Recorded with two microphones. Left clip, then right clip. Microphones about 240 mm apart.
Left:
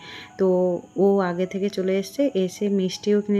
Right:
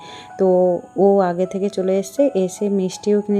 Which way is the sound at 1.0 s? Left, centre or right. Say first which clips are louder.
Right 5 dB; centre.